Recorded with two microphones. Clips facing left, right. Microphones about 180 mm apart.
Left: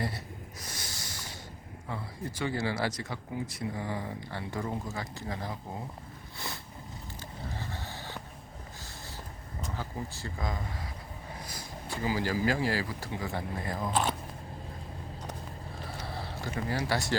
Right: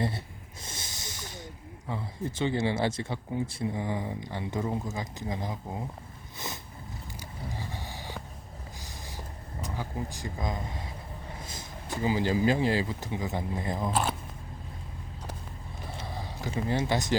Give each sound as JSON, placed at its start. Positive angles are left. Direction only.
{"t": 0.6, "sound": "snort", "side_deg": -25}
{"t": 1.9, "sound": "speech", "side_deg": -20}
{"t": 7.2, "sound": "vehicle", "side_deg": -15}
{"t": 9.7, "sound": "speech", "side_deg": -15}
{"t": 13.9, "sound": "speech", "side_deg": 0}
{"t": 16.0, "sound": "a sound", "side_deg": -15}
{"t": 16.6, "sound": "speech", "side_deg": -20}